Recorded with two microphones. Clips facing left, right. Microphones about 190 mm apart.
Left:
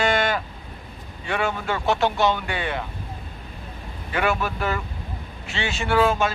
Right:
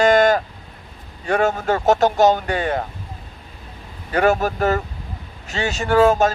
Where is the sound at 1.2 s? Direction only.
40° right (ahead or behind).